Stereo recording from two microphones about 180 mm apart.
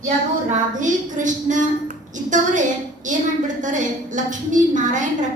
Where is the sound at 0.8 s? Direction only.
45° right (ahead or behind).